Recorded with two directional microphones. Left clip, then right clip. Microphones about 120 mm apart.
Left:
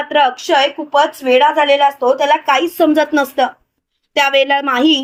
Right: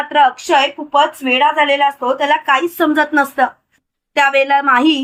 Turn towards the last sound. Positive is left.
turn(degrees=45)  # may be behind; listen again after turning